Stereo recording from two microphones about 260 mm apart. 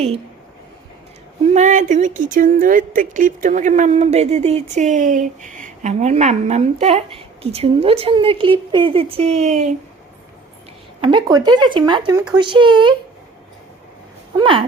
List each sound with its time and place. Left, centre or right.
1.5 s speech: right
11.0 s speech: centre
14.3 s speech: centre